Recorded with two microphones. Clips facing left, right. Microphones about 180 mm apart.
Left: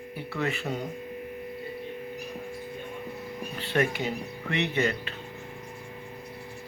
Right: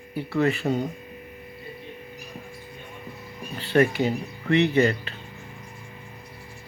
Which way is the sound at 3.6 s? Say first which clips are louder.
Right 7 dB; 35° right (ahead or behind).